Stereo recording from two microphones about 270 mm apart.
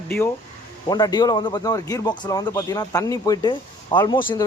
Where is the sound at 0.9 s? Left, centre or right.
Centre.